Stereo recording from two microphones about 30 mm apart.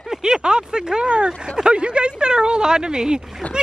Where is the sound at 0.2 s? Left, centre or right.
Right.